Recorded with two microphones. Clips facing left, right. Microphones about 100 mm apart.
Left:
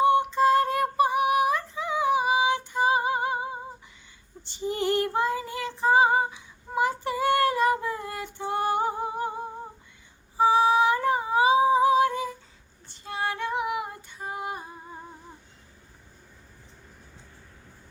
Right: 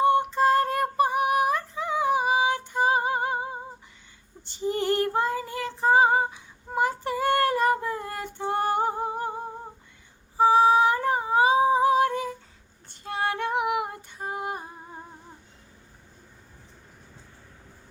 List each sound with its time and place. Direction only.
0.0 s female singing: 45° right (ahead or behind)
10.3 s humming: 45° right (ahead or behind)
12.9 s female singing: 55° right (ahead or behind)